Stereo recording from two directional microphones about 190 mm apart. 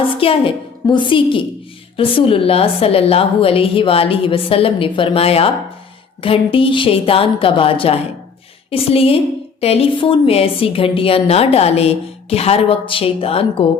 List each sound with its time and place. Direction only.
0.2 s a woman's voice: 30° left (ahead or behind)